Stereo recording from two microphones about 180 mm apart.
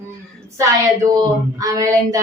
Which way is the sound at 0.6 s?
20° right (ahead or behind).